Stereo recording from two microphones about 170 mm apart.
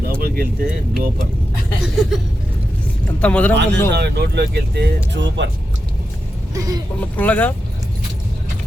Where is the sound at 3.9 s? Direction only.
75° right (ahead or behind).